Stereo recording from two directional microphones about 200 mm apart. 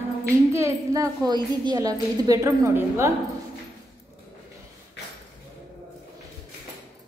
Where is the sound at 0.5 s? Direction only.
15° right (ahead or behind).